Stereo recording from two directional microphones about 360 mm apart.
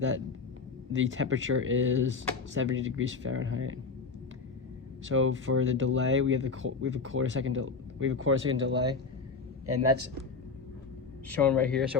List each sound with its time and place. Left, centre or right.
0.9 s speech: right
5.0 s speech: right
11.3 s speech: centre